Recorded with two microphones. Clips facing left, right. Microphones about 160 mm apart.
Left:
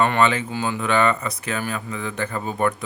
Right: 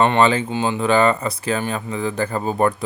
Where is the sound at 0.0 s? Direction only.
30° right (ahead or behind).